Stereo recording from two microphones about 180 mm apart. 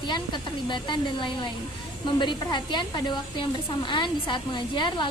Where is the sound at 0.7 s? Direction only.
25° left (ahead or behind).